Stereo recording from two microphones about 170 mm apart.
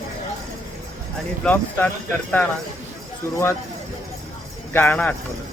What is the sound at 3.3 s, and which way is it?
Speech, 15° left (ahead or behind).